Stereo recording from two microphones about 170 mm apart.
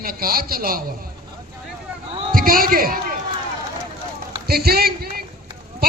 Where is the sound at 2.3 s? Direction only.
55° right (ahead or behind).